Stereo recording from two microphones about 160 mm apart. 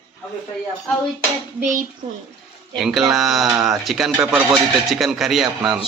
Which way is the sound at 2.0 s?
35° right (ahead or behind).